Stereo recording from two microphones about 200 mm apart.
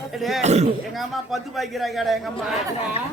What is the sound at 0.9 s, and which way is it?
Speech, centre (ahead or behind).